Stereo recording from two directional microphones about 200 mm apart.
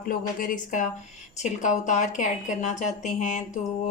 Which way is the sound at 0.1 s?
45° left (ahead or behind).